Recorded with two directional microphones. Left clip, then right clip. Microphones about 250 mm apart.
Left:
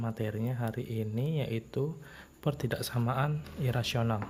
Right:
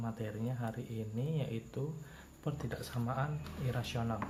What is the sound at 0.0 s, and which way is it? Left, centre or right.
Speech, left.